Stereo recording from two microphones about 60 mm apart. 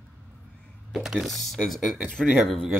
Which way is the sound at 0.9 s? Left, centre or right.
Centre.